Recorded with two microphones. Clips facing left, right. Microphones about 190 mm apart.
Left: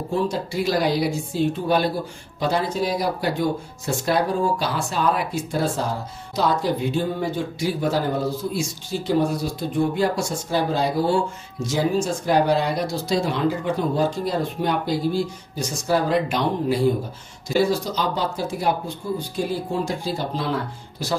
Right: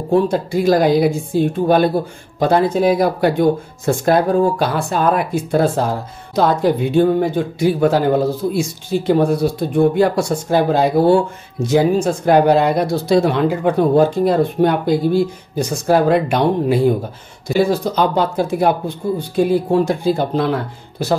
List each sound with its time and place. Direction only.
0.1 s speech: 55° right (ahead or behind)